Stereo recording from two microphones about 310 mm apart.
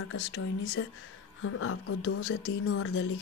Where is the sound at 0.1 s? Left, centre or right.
Left.